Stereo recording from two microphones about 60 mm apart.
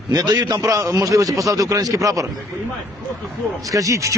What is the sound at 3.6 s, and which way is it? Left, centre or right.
Speech, right.